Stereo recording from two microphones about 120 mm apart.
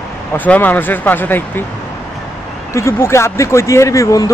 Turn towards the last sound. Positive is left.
turn(degrees=25)  # may be behind; listen again after turning